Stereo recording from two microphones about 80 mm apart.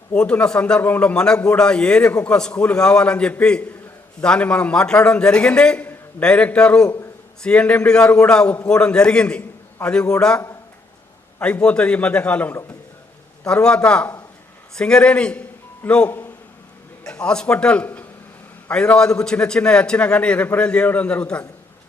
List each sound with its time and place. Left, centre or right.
0.1 s a man's voice: centre
17.0 s a man's voice: centre